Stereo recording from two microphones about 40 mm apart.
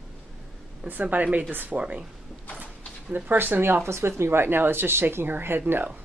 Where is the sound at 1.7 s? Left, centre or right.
Right.